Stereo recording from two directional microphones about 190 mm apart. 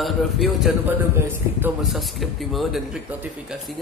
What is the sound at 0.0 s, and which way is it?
Speech, centre (ahead or behind).